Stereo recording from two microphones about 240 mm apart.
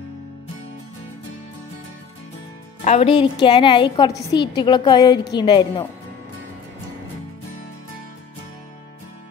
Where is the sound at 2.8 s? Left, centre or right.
Left.